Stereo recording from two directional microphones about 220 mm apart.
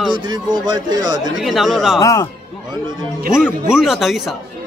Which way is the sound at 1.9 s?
15° left (ahead or behind).